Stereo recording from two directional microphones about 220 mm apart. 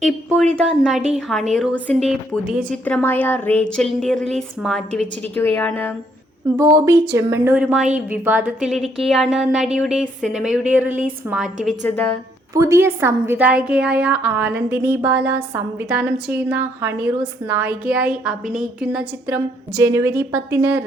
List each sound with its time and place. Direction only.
0.0 s a woman's voice: centre (ahead or behind)
6.6 s a woman's voice: 15° right (ahead or behind); by 12.1 s 5° left (ahead or behind)
12.5 s a woman's voice: 15° right (ahead or behind)